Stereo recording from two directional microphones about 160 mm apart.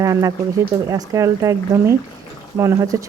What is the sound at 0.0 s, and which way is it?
Speech, 20° right (ahead or behind).